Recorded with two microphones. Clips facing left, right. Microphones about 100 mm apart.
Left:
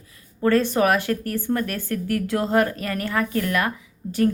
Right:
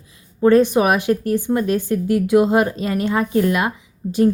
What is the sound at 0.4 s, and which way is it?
Speech, 15° right (ahead or behind).